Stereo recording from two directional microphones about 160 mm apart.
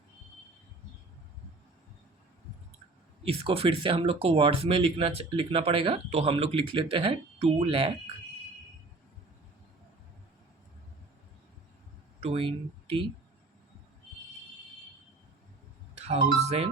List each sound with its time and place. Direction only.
3.2 s speech: 35° right (ahead or behind)
12.2 s speech: 35° right (ahead or behind)
16.0 s speech: 40° right (ahead or behind)